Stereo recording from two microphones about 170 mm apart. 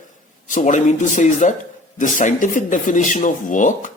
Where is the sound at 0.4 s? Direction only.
45° left (ahead or behind).